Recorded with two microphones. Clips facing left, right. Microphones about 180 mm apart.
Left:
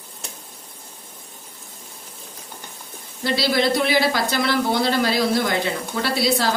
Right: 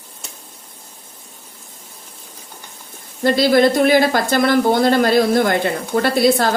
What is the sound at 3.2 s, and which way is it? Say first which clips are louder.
Speech: right 7 dB; 50° right (ahead or behind).